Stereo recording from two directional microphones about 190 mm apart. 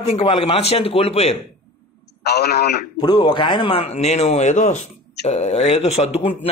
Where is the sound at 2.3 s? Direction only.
55° left (ahead or behind).